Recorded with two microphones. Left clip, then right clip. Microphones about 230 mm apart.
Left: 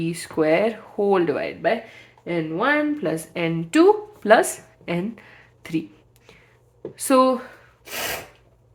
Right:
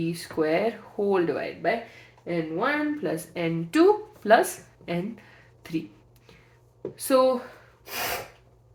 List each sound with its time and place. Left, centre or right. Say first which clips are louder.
0.0 s speech: left 5 dB; left
6.9 s speech: left 4 dB; left